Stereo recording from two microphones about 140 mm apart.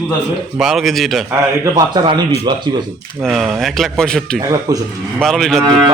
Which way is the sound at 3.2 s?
5° right (ahead or behind).